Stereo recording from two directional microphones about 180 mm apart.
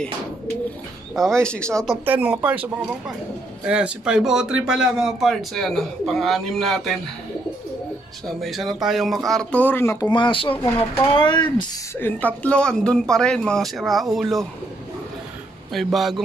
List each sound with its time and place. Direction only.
1.1 s speech: 5° left (ahead or behind)
2.0 s speech: 10° right (ahead or behind)
3.6 s speech: 5° right (ahead or behind)
8.4 s speech: centre (ahead or behind); by 11.4 s 25° left (ahead or behind)
12.0 s speech: 10° left (ahead or behind)
15.7 s speech: centre (ahead or behind)